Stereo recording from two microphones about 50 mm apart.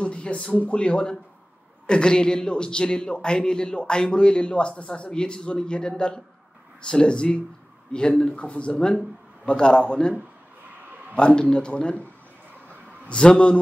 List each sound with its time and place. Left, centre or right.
0.0 s a man's voice: left
11.1 s speech: left
13.1 s speech: centre